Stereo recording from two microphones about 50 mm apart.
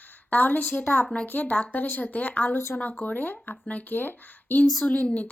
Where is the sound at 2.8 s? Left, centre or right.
Left.